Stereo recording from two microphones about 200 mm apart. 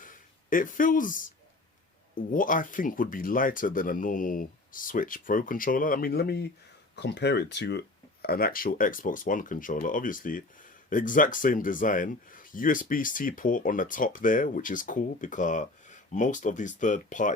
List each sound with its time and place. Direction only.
0.0 s speech: 40° left (ahead or behind)